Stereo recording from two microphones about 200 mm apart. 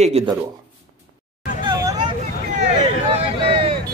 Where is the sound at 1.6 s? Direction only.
20° right (ahead or behind).